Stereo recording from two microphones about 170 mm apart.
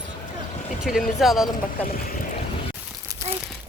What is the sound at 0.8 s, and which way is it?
Speech, centre (ahead or behind).